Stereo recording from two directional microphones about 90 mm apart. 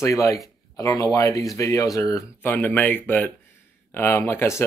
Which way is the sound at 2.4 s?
20° left (ahead or behind).